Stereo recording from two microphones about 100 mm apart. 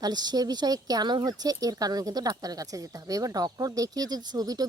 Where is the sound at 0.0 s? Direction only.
45° right (ahead or behind).